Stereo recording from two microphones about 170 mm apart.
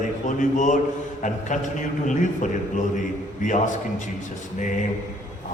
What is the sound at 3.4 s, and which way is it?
Speech, 45° left (ahead or behind).